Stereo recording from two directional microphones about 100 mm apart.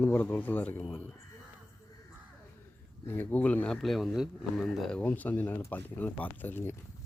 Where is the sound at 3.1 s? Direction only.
20° left (ahead or behind).